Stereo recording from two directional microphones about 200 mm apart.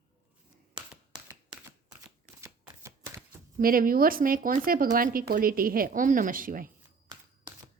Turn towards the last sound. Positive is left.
turn(degrees=-45)  # may be behind; listen again after turning